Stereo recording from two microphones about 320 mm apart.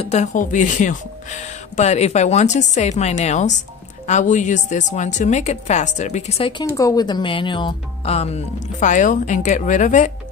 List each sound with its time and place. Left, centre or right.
0.0 s a woman's voice: left